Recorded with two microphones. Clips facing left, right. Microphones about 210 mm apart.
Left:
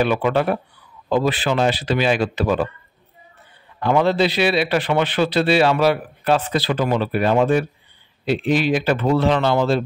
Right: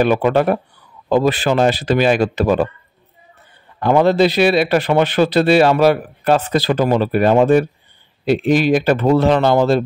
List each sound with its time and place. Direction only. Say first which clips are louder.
0.0 s a man's voice: right 4 dB; 45° right (ahead or behind)
3.8 s a man's voice: right 4 dB; 45° right (ahead or behind)